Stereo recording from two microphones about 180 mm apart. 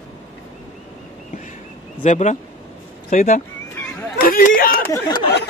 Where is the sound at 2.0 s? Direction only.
40° left (ahead or behind).